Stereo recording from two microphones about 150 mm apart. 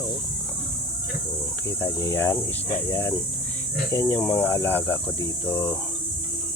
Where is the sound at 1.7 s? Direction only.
20° left (ahead or behind).